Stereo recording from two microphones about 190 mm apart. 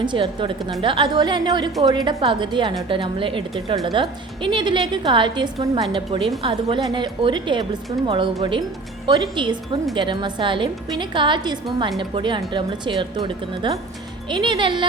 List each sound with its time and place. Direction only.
0.0 s a woman's voice: 25° right (ahead or behind)